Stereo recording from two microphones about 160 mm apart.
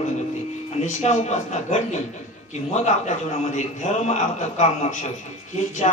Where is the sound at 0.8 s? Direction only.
45° left (ahead or behind).